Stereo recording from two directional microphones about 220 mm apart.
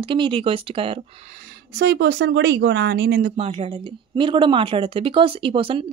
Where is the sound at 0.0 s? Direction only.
25° right (ahead or behind).